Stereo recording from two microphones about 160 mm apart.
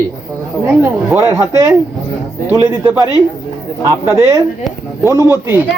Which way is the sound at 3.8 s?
15° right (ahead or behind).